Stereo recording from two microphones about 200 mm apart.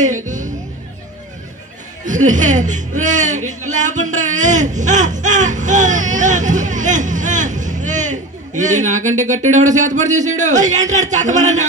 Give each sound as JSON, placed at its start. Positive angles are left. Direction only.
{"t": 0.0, "sound": "speech", "side_deg": -40}
{"t": 2.2, "sound": "a man's voice", "side_deg": -40}